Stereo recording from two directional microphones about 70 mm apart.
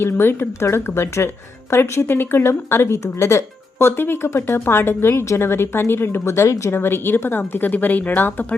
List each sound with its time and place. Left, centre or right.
0.0 s speech: left